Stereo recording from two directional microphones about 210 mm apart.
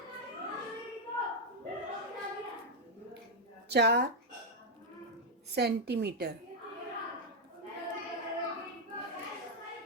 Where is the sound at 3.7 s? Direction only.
50° right (ahead or behind).